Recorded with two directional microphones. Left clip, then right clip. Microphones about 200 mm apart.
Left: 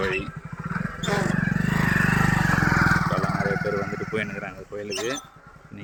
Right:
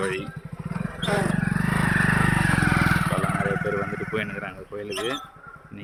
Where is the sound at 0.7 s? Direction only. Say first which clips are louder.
Even; 25° left (ahead or behind).